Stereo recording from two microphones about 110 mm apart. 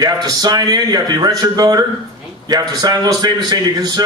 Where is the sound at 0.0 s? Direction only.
40° right (ahead or behind).